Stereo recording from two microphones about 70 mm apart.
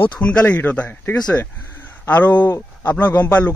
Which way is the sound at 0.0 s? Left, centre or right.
Centre.